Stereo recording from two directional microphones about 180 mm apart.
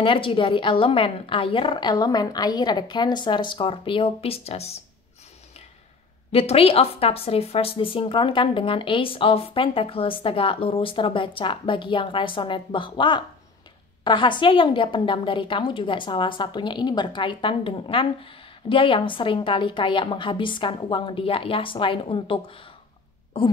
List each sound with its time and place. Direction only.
0.0 s a woman's voice: 30° left (ahead or behind)
6.3 s a woman's voice: 35° left (ahead or behind)